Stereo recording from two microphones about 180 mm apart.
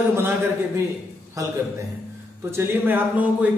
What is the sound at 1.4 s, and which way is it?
A man's voice, 20° right (ahead or behind).